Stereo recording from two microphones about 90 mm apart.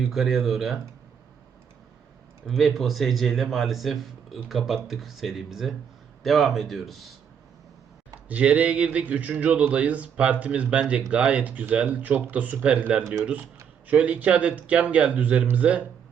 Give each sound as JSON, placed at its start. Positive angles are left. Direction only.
{"t": 0.1, "sound": "speech", "side_deg": 0}
{"t": 2.5, "sound": "speech", "side_deg": 0}
{"t": 8.3, "sound": "speech", "side_deg": -15}